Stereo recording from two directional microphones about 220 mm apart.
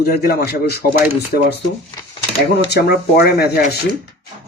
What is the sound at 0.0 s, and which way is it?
Speech, 45° left (ahead or behind).